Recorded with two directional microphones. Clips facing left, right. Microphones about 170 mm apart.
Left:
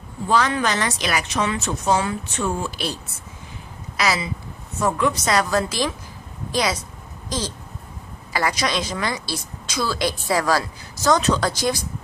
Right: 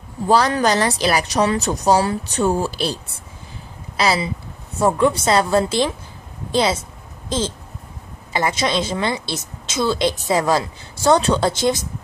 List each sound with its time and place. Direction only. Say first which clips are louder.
0.3 s a woman's voice: right 4 dB; 40° right (ahead or behind)